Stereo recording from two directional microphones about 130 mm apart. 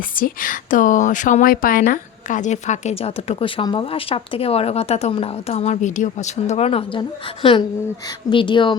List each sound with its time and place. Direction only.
0.2 s a woman's voice: 90° left; by 7.0 s 50° left (ahead or behind)
8.3 s speech: 40° left (ahead or behind)